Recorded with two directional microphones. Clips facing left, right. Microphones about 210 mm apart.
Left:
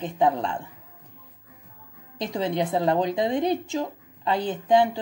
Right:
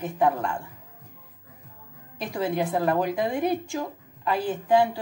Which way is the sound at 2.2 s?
20° left (ahead or behind).